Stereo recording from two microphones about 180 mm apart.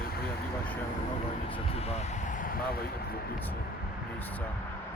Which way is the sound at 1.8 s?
35° left (ahead or behind).